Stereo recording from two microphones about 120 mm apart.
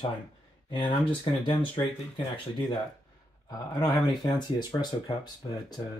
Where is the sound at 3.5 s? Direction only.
35° left (ahead or behind).